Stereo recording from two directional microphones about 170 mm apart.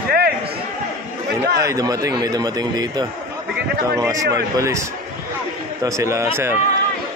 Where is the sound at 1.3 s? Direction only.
75° right (ahead or behind).